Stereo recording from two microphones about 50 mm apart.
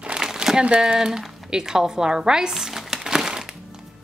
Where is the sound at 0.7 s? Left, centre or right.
Centre.